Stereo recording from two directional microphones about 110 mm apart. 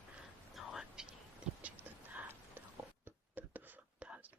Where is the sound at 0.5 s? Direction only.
5° right (ahead or behind).